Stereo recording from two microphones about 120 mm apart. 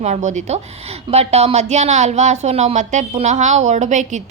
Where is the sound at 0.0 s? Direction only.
80° right.